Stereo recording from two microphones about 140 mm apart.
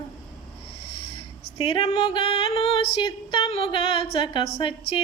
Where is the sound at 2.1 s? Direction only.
40° left (ahead or behind).